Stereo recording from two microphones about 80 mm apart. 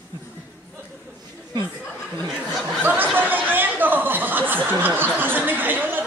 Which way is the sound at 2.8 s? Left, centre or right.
Right.